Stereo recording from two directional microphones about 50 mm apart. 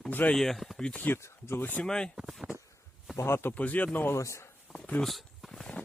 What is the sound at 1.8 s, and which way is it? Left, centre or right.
Speech, centre.